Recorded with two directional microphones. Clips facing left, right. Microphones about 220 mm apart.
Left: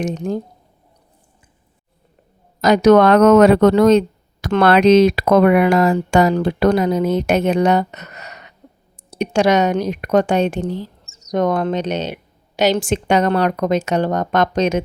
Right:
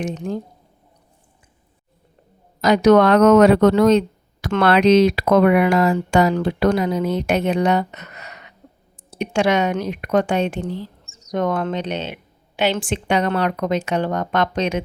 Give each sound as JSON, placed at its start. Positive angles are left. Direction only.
{"t": 0.0, "sound": "a woman's voice", "side_deg": 40}
{"t": 2.6, "sound": "a woman's voice", "side_deg": 45}